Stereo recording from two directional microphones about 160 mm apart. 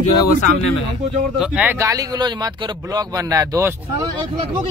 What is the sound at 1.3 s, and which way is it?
Speech, 5° right (ahead or behind).